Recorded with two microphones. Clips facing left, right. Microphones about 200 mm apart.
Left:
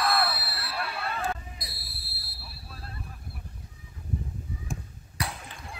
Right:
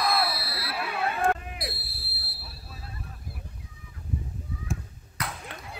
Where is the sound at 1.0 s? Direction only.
65° right (ahead or behind).